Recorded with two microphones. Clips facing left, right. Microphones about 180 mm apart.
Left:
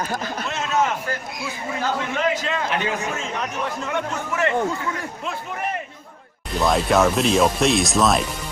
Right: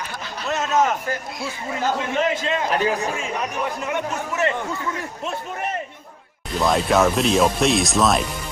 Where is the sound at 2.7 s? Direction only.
40° right (ahead or behind).